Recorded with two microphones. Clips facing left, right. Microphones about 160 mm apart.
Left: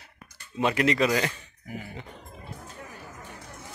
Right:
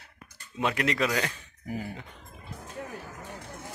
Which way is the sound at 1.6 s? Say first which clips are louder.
Right 4 dB; 35° right (ahead or behind).